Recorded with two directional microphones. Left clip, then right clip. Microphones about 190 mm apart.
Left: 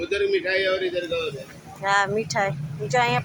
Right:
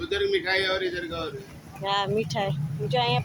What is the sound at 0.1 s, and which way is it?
Speech, 30° right (ahead or behind).